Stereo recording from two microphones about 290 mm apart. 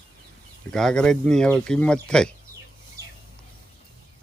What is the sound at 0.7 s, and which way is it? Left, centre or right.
A man's voice, centre.